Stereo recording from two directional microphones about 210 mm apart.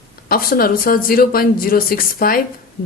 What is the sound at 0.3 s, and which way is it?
Speech, 45° left (ahead or behind).